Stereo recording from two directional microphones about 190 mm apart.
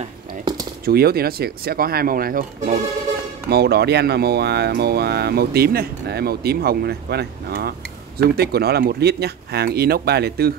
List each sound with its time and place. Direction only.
0.6 s speech: 50° right (ahead or behind)
3.4 s speech: 55° right (ahead or behind)